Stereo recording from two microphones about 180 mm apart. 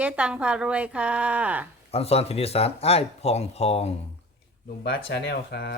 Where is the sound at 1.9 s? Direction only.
35° left (ahead or behind).